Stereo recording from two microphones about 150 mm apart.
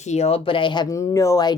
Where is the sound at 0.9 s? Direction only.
20° left (ahead or behind).